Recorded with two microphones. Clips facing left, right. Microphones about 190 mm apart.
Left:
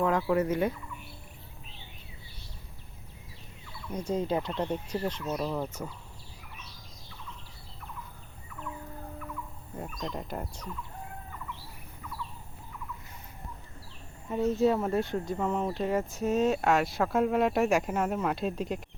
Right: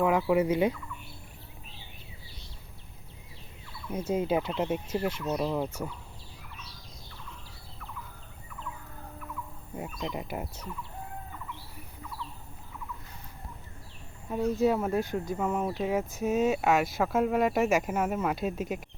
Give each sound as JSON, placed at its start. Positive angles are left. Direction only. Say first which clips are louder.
{"t": 0.0, "sound": "speech", "louder": "right 2 dB", "side_deg": -10}
{"t": 3.9, "sound": "speech", "louder": "right 2 dB", "side_deg": -10}
{"t": 9.7, "sound": "speech", "louder": "right 1 dB", "side_deg": -5}
{"t": 14.3, "sound": "speech", "louder": "even", "side_deg": 0}